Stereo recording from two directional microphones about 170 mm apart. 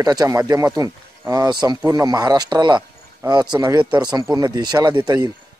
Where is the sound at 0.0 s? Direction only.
20° right (ahead or behind).